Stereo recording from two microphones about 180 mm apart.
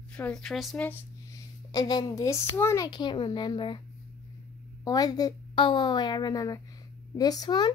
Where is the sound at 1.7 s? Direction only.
20° left (ahead or behind).